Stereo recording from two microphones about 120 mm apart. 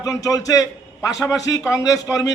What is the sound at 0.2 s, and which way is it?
A man's voice, 30° left (ahead or behind).